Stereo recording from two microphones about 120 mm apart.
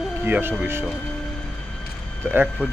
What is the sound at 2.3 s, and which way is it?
Speech, 20° right (ahead or behind).